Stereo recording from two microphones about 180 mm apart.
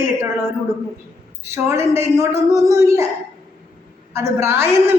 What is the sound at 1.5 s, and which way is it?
A man's voice, 15° right (ahead or behind).